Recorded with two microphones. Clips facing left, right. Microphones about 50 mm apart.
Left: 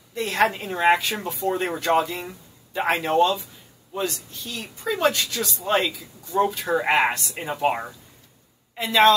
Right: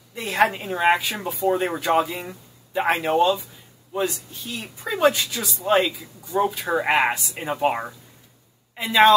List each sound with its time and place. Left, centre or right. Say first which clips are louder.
0.1 s speech: right 1 dB; centre